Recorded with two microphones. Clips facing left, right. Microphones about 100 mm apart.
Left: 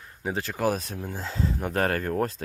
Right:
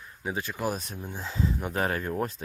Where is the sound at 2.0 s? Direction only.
45° left (ahead or behind).